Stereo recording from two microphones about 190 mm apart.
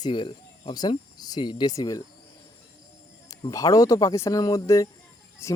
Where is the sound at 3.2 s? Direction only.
20° left (ahead or behind).